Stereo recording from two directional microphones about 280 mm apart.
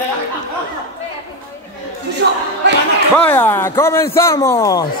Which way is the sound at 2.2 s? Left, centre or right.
Right.